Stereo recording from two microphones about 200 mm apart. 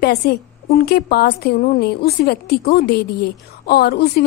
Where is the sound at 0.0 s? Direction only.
50° left (ahead or behind).